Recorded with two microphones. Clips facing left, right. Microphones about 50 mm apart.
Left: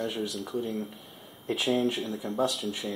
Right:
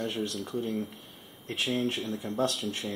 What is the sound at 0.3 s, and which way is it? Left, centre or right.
Speech, centre.